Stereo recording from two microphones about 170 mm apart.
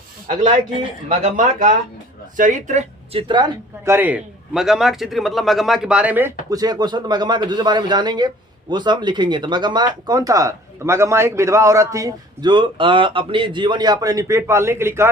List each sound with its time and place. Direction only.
1.2 s speech: 50° right (ahead or behind); by 3.4 s 30° right (ahead or behind)
3.8 s a man's voice: 10° right (ahead or behind)